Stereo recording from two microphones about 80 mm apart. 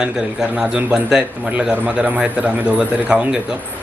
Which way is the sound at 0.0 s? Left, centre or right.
Centre.